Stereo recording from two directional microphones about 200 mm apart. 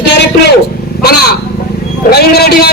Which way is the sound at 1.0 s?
50° left (ahead or behind).